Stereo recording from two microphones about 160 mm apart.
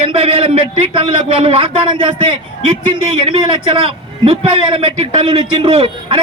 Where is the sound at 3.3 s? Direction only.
35° right (ahead or behind).